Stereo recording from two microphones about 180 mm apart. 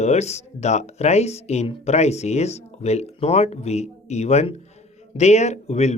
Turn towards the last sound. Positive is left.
turn(degrees=40)  # may be behind; listen again after turning